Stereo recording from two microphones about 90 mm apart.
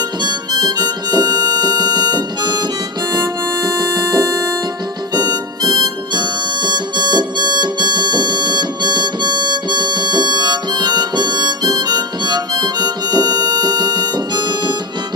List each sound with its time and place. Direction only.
0.2 s harmonica: 55° right (ahead or behind)